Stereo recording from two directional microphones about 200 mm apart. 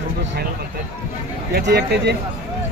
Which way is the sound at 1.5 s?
55° right (ahead or behind).